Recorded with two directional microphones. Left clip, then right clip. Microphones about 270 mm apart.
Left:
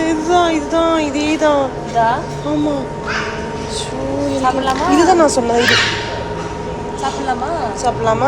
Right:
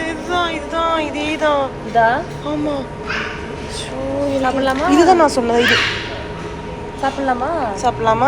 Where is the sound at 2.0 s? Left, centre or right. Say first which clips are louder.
Right 1 dB; right.